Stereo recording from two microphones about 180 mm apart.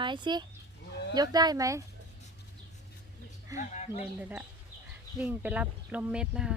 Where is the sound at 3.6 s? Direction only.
40° left (ahead or behind).